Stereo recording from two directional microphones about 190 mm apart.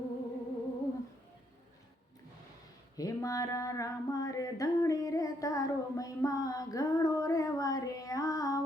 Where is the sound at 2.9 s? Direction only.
20° left (ahead or behind).